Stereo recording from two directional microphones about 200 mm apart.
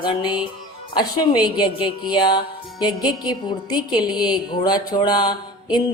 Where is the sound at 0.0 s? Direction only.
20° left (ahead or behind).